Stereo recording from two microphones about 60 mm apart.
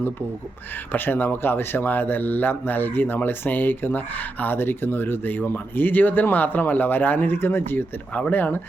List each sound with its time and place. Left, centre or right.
0.9 s speech: left